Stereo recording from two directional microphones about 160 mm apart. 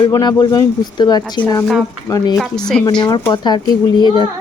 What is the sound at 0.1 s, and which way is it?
A child's voice, 25° left (ahead or behind).